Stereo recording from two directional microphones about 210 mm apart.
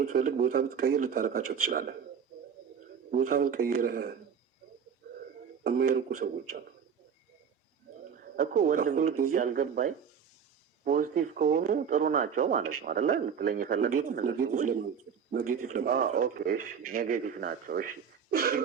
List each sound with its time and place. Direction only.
0.0 s speech: 40° right (ahead or behind)
3.1 s speech: 40° right (ahead or behind)
5.6 s speech: 45° right (ahead or behind)
8.1 s speech: 40° right (ahead or behind)